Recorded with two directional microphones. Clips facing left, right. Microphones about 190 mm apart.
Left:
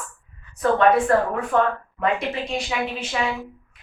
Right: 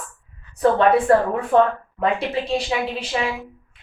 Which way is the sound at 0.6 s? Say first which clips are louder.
Right 1 dB; 30° right (ahead or behind).